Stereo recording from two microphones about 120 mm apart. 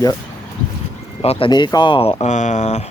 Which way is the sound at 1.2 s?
55° left (ahead or behind).